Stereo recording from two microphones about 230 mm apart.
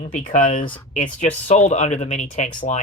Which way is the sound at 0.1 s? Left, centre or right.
Left.